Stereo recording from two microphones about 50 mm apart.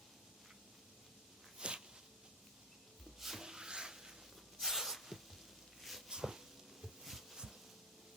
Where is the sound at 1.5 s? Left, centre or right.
Centre.